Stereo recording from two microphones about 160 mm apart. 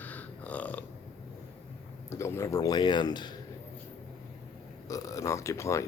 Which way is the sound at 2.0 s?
15° left (ahead or behind).